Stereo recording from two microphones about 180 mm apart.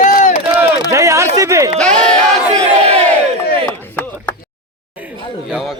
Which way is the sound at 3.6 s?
10° left (ahead or behind).